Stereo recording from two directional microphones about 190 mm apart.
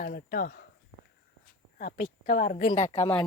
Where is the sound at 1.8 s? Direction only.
45° left (ahead or behind).